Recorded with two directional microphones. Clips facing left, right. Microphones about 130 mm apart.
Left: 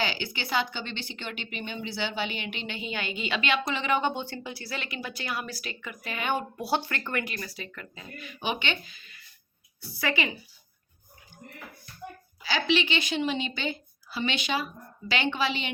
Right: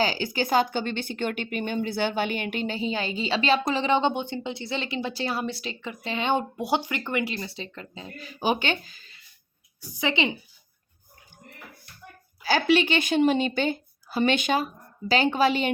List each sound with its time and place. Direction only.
0.0 s speech: 40° right (ahead or behind)
9.8 s a woman's voice: 20° right (ahead or behind)
12.4 s a woman's voice: 45° right (ahead or behind)